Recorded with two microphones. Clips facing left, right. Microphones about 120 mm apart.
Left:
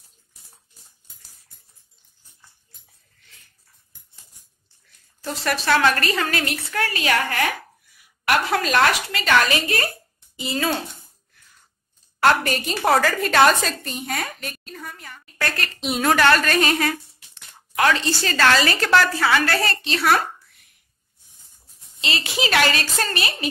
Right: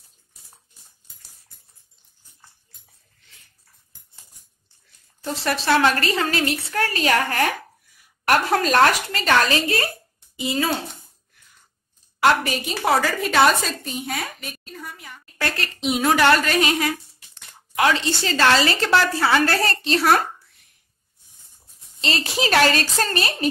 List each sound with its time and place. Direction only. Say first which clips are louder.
5.2 s a woman's voice: even; 25° right (ahead or behind)
9.6 s a woman's voice: right 1 dB; 25° right (ahead or behind)
12.2 s a woman's voice: even; 5° right (ahead or behind)
15.4 s a woman's voice: right 2 dB; 25° right (ahead or behind)
22.0 s a woman's voice: right 2 dB; 40° right (ahead or behind)